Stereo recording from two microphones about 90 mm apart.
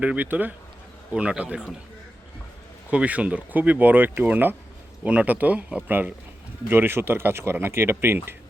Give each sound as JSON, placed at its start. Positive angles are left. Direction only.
{"t": 0.0, "sound": "speech", "side_deg": -15}
{"t": 2.9, "sound": "speech", "side_deg": -15}